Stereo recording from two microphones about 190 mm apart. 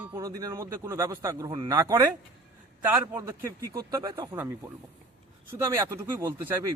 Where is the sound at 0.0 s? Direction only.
15° right (ahead or behind).